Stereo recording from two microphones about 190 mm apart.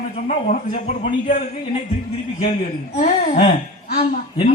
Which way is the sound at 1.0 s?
45° left (ahead or behind).